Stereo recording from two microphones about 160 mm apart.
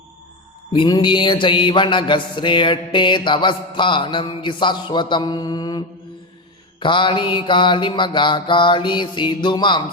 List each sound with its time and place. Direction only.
0.7 s mantra: 30° left (ahead or behind)